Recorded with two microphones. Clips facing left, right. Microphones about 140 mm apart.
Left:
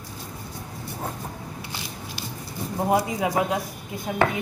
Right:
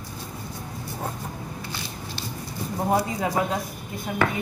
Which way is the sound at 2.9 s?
15° left (ahead or behind).